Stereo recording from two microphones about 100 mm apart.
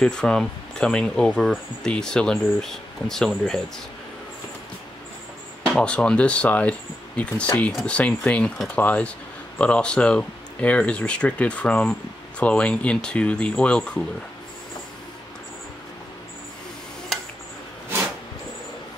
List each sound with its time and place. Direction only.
0.0 s speech: 5° left (ahead or behind)
5.7 s speech: 10° left (ahead or behind)